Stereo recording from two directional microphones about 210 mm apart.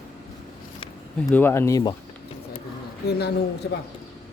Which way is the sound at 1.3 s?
10° left (ahead or behind).